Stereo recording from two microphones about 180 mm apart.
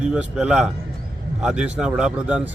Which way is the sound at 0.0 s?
5° right (ahead or behind).